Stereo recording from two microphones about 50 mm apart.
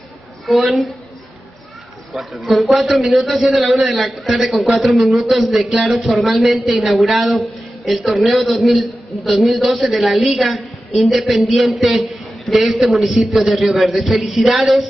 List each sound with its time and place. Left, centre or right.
0.5 s speech: centre
2.1 s speech: centre